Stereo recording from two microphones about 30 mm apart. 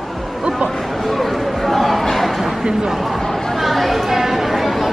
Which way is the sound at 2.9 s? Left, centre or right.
Centre.